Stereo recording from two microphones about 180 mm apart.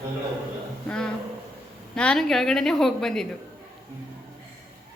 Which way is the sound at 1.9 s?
5° left (ahead or behind).